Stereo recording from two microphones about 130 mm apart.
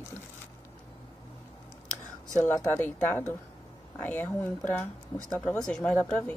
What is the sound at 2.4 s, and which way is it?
Speech, 20° left (ahead or behind).